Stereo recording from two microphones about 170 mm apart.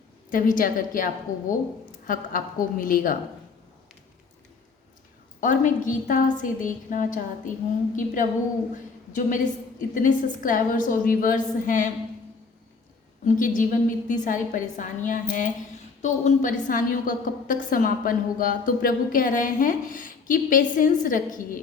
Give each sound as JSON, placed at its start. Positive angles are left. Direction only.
{"t": 0.3, "sound": "a woman's voice", "side_deg": 55}
{"t": 5.4, "sound": "a woman's voice", "side_deg": 50}
{"t": 13.2, "sound": "a woman's voice", "side_deg": 50}